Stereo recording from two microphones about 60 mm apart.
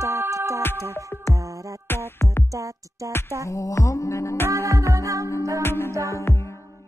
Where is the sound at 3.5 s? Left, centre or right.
Left.